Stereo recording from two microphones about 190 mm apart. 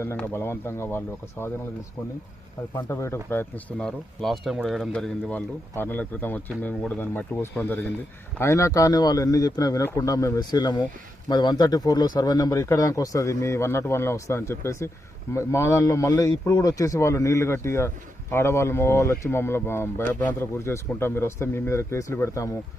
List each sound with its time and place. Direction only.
0.0 s speech: 10° left (ahead or behind)
2.7 s speech: 15° left (ahead or behind)